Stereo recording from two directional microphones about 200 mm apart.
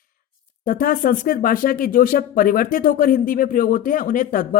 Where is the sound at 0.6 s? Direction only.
45° left (ahead or behind).